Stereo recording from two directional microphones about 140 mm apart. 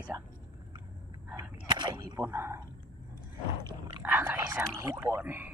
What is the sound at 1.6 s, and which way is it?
Speech, 30° right (ahead or behind).